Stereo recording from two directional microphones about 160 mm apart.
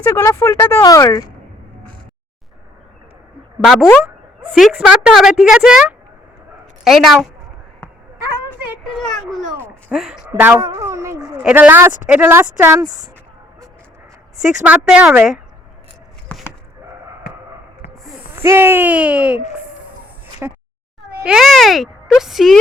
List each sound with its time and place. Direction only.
0.0 s speech: 15° left (ahead or behind)
3.6 s a woman's voice: centre (ahead or behind)
9.0 s a woman's voice: 5° left (ahead or behind); by 11.2 s 20° right (ahead or behind)
11.2 s speech: 5° right (ahead or behind)
14.6 s speech: 10° right (ahead or behind)
16.3 s a sound: 10° left (ahead or behind)
18.3 s speech: 15° right (ahead or behind)
20.4 s speech: 10° right (ahead or behind)
21.2 s a woman's voice: centre (ahead or behind)